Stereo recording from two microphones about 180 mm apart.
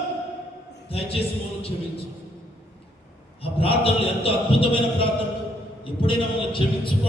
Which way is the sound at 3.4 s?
30° left (ahead or behind).